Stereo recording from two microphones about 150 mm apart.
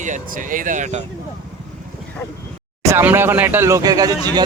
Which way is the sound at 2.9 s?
15° right (ahead or behind).